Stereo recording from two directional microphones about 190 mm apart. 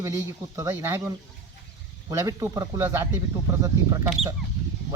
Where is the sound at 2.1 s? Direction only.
15° right (ahead or behind).